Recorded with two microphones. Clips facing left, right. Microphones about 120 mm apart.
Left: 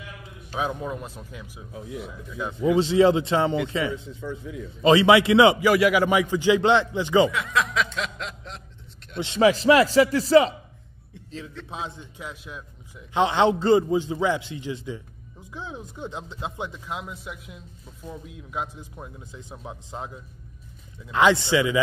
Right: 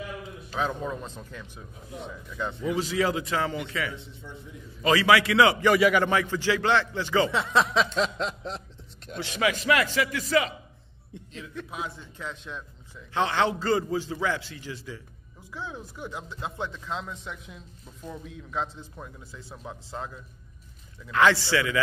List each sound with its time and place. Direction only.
0.5 s speech: 15° left (ahead or behind)
2.6 s a man's voice: 25° left (ahead or behind)
4.2 s a man's voice: 90° left
4.6 s a man's voice: 25° left (ahead or behind)
5.6 s a man's voice: centre (ahead or behind)
6.0 s speech: 15° left (ahead or behind)
7.2 s speech: 30° right (ahead or behind)
9.2 s a man's voice: 30° left (ahead or behind)
11.7 s a man's voice: 20° left (ahead or behind)